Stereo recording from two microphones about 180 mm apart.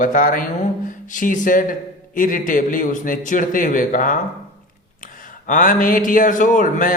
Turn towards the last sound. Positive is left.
turn(degrees=50)  # may be behind; listen again after turning